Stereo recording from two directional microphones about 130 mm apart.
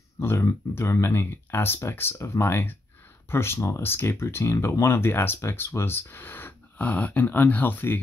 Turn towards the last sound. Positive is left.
turn(degrees=15)  # may be behind; listen again after turning